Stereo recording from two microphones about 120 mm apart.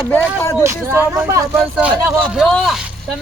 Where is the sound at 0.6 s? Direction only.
20° right (ahead or behind).